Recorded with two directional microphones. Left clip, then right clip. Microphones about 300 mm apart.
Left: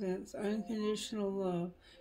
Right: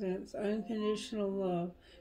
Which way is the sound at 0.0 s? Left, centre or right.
Left.